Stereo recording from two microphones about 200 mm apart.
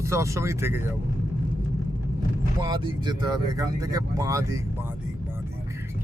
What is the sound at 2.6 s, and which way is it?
Speech, 20° right (ahead or behind).